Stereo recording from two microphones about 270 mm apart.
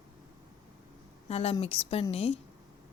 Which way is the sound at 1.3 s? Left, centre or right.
Left.